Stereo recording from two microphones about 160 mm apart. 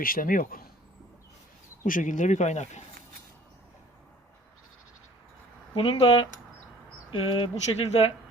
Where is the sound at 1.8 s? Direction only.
55° left (ahead or behind).